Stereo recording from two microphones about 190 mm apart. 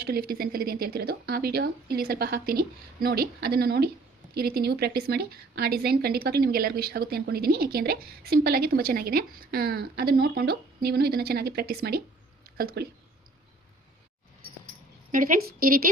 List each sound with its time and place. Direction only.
0.0 s a woman's voice: 55° right (ahead or behind)
15.1 s speech: 45° right (ahead or behind)